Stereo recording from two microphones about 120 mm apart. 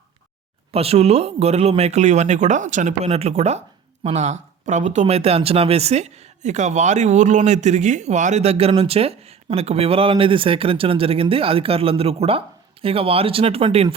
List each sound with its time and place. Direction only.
0.7 s speech: 55° right (ahead or behind)